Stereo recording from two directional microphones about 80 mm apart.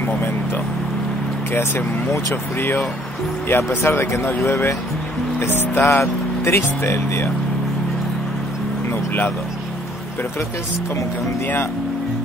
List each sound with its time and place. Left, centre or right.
2.6 s speech: left